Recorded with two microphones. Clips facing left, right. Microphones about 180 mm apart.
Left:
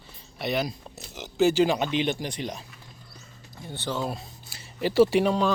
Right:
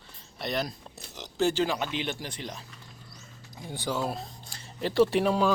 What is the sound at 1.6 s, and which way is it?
Speech, 20° left (ahead or behind).